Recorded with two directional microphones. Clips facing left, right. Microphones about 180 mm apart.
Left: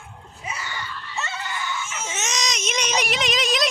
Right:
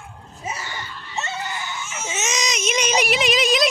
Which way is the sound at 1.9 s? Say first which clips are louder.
Right 2 dB; 5° right (ahead or behind).